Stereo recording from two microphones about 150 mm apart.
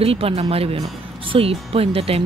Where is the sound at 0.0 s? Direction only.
40° right (ahead or behind).